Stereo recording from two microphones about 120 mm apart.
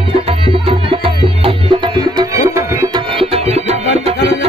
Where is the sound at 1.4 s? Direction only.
40° right (ahead or behind).